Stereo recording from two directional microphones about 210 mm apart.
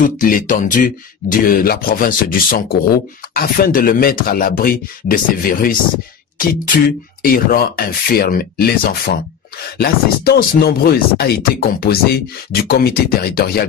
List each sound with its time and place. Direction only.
0.0 s speech: 40° left (ahead or behind)
7.2 s speech: 45° left (ahead or behind)